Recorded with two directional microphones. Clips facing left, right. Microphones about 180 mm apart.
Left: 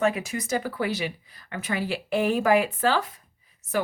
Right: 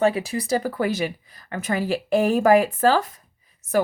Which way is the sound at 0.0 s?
35° right (ahead or behind).